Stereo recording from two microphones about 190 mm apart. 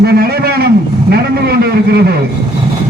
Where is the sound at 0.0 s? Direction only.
55° right (ahead or behind).